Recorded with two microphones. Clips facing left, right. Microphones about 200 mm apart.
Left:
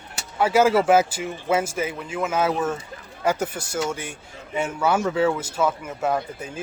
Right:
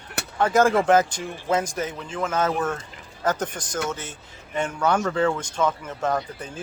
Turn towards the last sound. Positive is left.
turn(degrees=10)  # may be behind; listen again after turning